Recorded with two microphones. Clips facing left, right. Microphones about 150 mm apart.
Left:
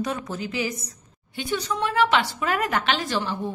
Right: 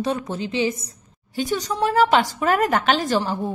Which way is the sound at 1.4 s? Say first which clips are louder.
Right 4 dB; 40° right (ahead or behind).